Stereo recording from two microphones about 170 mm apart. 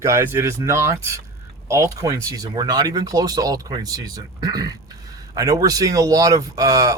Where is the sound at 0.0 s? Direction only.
15° right (ahead or behind).